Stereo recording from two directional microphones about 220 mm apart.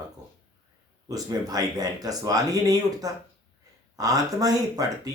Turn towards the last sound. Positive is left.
turn(degrees=-15)  # may be behind; listen again after turning